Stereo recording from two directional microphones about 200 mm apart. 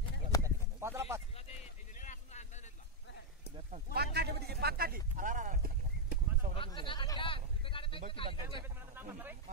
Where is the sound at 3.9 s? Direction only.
55° right (ahead or behind).